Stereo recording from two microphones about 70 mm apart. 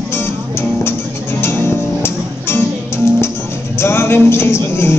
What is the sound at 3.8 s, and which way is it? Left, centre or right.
Music, left.